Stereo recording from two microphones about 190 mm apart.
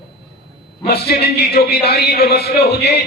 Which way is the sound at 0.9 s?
55° left (ahead or behind).